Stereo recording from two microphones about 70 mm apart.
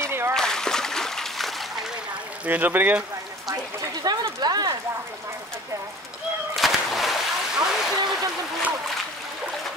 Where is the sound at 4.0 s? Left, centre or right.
Right.